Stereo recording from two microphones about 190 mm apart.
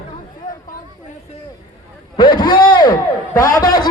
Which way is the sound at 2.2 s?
25° left (ahead or behind).